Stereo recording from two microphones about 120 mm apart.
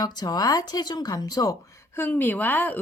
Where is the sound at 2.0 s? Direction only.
15° left (ahead or behind).